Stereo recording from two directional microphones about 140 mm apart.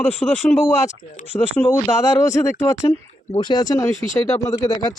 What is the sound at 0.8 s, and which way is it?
Speech, 55° left (ahead or behind).